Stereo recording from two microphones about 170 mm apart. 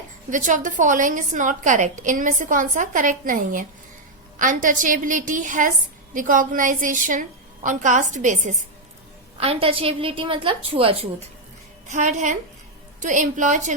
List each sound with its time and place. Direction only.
0.3 s a woman's voice: 50° right (ahead or behind)
9.4 s a woman's voice: 35° right (ahead or behind)